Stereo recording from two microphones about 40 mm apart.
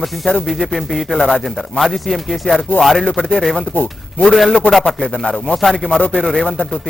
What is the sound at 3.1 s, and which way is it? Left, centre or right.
Speech, centre.